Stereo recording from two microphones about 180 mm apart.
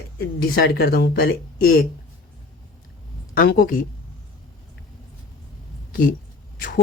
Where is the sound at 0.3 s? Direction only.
60° left (ahead or behind).